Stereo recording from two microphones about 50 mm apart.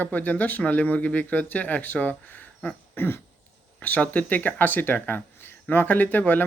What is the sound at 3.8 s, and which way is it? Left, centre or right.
Speech, left.